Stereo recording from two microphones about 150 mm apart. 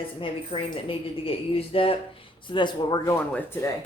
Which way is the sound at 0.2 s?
35° left (ahead or behind).